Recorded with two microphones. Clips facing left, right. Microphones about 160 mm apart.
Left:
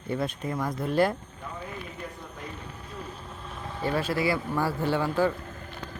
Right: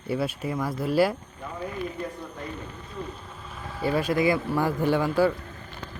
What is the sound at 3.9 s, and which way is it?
Speech, 15° right (ahead or behind).